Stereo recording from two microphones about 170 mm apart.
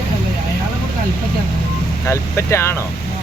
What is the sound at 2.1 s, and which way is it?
Speech, 15° left (ahead or behind).